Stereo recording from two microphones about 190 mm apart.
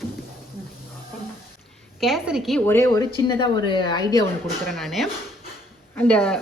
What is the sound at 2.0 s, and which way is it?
Speech, centre (ahead or behind).